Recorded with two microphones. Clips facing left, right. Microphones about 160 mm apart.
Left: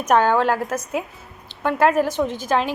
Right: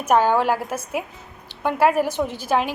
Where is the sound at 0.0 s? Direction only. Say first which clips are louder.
Left 1 dB; 10° right (ahead or behind).